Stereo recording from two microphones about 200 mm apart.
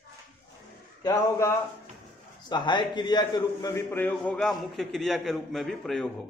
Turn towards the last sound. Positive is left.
turn(degrees=0)  # may be behind; listen again after turning